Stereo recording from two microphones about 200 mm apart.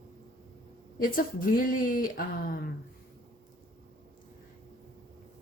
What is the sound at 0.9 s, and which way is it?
Speech, 45° left (ahead or behind).